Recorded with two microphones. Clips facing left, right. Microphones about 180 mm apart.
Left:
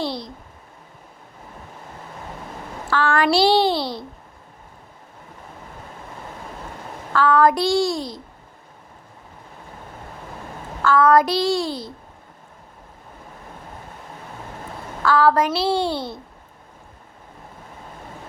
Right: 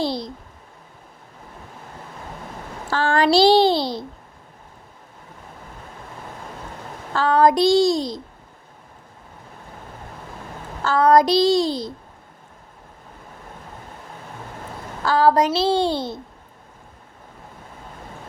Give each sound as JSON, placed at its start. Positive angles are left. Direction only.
{"t": 2.9, "sound": "a sound", "side_deg": -40}
{"t": 3.2, "sound": "a child's voice", "side_deg": -25}
{"t": 3.8, "sound": "a child's voice", "side_deg": 0}
{"t": 7.1, "sound": "a child's voice", "side_deg": -35}
{"t": 7.4, "sound": "a child's voice", "side_deg": -20}
{"t": 10.8, "sound": "child singing", "side_deg": -35}
{"t": 11.2, "sound": "a child's voice", "side_deg": -20}
{"t": 15.1, "sound": "a child's voice", "side_deg": -20}